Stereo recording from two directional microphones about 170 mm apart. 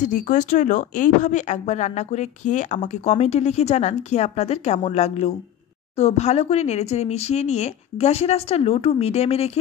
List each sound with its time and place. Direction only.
0.0 s speech: 50° left (ahead or behind)